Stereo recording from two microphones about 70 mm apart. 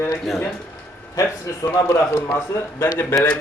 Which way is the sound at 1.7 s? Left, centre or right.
Left.